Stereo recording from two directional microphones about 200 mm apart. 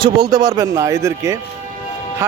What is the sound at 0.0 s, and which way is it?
Speech, 20° right (ahead or behind).